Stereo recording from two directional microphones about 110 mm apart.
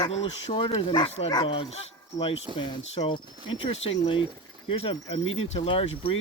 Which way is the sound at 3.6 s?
55° left (ahead or behind).